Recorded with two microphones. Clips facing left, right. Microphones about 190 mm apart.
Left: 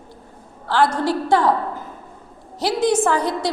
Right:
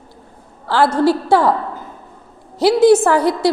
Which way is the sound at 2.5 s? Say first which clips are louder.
Right 8 dB; 10° right (ahead or behind).